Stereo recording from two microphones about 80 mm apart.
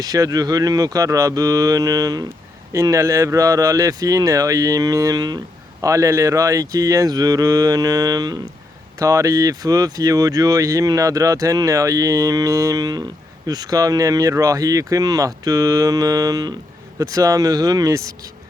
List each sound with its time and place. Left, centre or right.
0.0 s speech: right
2.9 s speech: right
5.8 s speech: right
9.0 s speech: right